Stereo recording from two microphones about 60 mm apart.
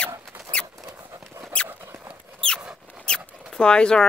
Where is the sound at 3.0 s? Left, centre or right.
Centre.